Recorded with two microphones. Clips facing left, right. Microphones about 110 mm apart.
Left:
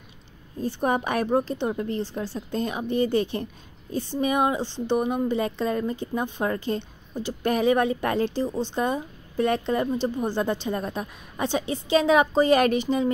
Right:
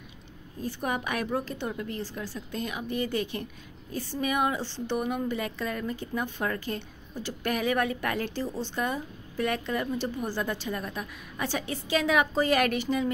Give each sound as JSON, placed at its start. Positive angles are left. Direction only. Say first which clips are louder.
{"t": 0.6, "sound": "a woman's voice", "louder": "left 7 dB", "side_deg": 30}